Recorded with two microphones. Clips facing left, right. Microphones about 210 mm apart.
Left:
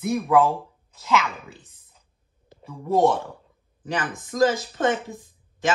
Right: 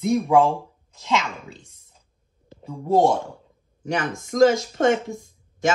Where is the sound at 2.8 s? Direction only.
30° right (ahead or behind).